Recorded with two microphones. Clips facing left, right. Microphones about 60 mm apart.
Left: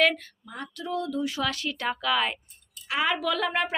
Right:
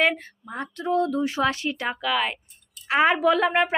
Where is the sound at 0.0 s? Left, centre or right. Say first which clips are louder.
Right 1 dB; right; by 2.4 s centre.